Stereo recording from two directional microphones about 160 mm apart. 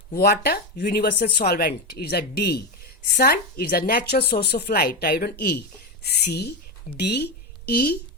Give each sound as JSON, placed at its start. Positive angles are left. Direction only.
{"t": 0.2, "sound": "a woman's voice", "side_deg": 85}
{"t": 3.2, "sound": "a woman's voice", "side_deg": 75}